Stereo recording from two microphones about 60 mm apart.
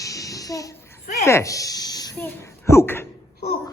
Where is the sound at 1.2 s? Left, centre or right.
Left.